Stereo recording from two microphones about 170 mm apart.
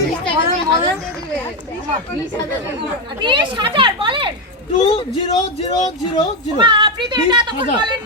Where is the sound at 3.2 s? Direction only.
30° right (ahead or behind).